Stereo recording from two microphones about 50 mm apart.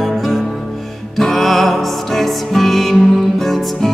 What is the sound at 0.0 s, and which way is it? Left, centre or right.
Music, centre.